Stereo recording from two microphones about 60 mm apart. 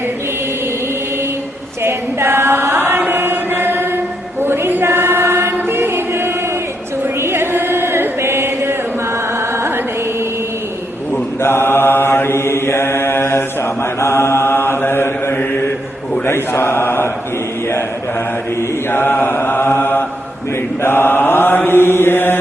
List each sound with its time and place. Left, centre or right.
1.8 s chant: right
9.5 s music: right
11.3 s mantra: left
18.9 s mantra: left